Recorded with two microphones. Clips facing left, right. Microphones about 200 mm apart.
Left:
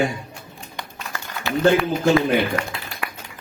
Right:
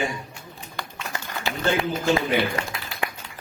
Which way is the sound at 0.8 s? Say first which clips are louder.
Even; 20° left (ahead or behind).